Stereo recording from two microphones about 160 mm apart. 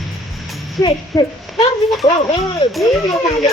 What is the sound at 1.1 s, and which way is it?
A child's voice, 20° left (ahead or behind).